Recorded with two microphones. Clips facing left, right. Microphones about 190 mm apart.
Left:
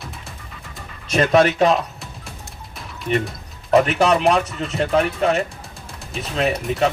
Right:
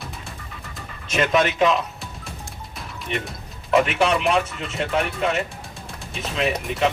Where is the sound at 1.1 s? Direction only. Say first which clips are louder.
Left 5 dB; 40° left (ahead or behind).